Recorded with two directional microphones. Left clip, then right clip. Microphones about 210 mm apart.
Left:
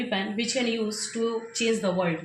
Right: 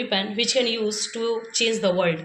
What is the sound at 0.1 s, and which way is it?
Speech, 15° right (ahead or behind).